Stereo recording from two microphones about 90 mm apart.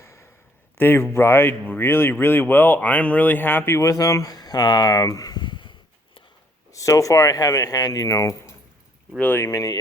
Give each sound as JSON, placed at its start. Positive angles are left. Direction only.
{"t": 0.0, "sound": "a sound", "side_deg": 30}
{"t": 0.8, "sound": "speech", "side_deg": 25}
{"t": 6.7, "sound": "speech", "side_deg": 40}
{"t": 9.1, "sound": "speech", "side_deg": 15}
{"t": 9.4, "sound": "speech", "side_deg": 40}